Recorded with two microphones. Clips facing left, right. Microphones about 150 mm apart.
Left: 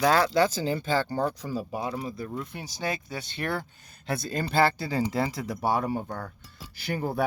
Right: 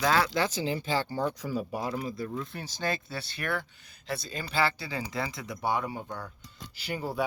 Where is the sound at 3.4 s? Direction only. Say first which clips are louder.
Left 2 dB; 30° left (ahead or behind).